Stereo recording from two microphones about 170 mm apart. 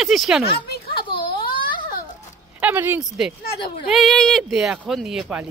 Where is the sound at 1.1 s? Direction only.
30° left (ahead or behind).